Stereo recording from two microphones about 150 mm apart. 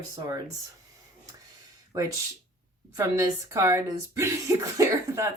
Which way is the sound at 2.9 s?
20° right (ahead or behind).